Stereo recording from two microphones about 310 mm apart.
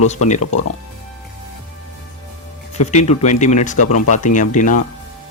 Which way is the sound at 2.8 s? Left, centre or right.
Left.